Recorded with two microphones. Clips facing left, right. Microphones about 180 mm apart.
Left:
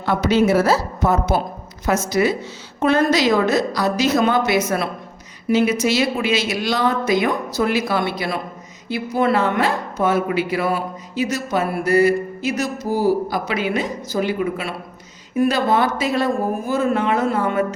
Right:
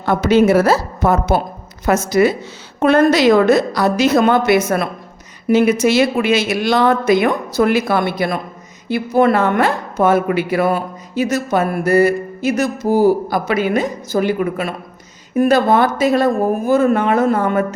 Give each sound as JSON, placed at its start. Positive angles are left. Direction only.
{"t": 0.0, "sound": "speech", "side_deg": -50}